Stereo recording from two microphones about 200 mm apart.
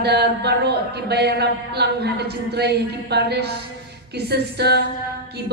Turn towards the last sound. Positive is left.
turn(degrees=-55)  # may be behind; listen again after turning